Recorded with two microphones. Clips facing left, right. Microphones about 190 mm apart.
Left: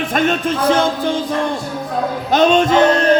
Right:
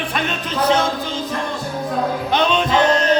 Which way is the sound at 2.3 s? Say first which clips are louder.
Left 7 dB; 45° left (ahead or behind).